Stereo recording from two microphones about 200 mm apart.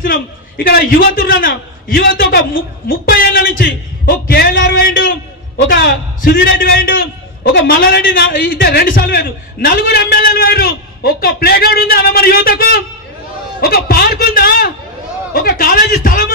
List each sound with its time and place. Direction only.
0.0 s a man's voice: 45° left (ahead or behind)